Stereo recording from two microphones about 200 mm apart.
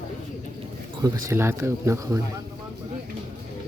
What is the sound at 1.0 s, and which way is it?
Speech, 15° right (ahead or behind).